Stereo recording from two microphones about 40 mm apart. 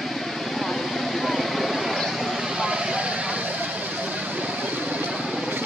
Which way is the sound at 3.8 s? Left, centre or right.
Right.